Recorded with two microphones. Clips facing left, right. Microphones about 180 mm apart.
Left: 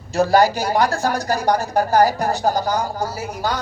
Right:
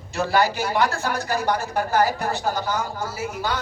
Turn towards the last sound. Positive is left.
turn(degrees=40)  # may be behind; listen again after turning